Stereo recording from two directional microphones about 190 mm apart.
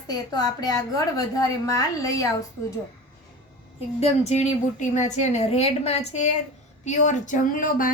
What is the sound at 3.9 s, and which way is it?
A woman's voice, 35° left (ahead or behind).